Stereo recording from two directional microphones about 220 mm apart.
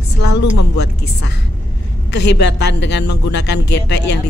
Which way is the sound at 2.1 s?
50° left (ahead or behind).